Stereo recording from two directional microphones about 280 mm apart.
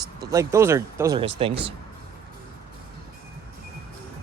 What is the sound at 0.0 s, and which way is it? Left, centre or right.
Speech, centre.